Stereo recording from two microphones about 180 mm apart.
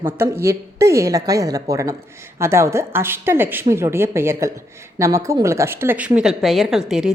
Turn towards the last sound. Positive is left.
turn(degrees=0)  # may be behind; listen again after turning